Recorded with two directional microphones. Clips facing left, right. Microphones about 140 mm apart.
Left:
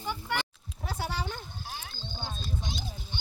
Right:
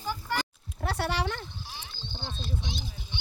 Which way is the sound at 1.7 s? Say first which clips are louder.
Left 2 dB; 45° left (ahead or behind).